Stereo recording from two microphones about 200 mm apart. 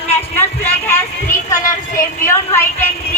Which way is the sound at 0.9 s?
10° left (ahead or behind).